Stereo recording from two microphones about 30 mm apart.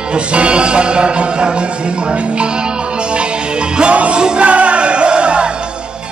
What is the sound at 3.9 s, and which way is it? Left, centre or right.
Music, right.